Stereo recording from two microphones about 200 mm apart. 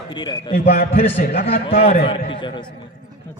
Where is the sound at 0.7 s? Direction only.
50° left (ahead or behind).